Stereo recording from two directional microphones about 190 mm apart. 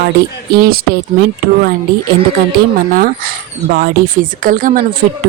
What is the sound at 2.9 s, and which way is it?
Speech, 50° right (ahead or behind).